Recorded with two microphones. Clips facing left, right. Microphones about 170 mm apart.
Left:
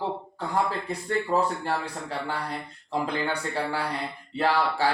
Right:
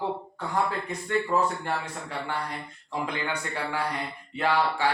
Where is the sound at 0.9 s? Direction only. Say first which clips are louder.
Even; 35° left (ahead or behind).